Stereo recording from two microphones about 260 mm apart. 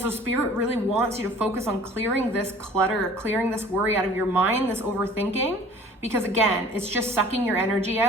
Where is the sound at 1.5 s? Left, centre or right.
Centre.